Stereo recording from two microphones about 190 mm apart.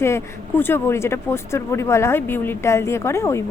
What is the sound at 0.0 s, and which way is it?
A woman's voice, 10° left (ahead or behind).